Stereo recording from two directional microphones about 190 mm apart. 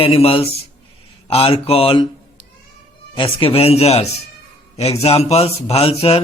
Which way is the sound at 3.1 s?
25° left (ahead or behind).